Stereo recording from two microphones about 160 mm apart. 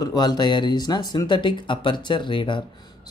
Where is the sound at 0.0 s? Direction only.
25° left (ahead or behind).